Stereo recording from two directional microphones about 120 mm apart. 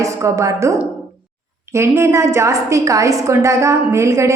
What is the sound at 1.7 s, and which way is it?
A woman's voice, 20° right (ahead or behind).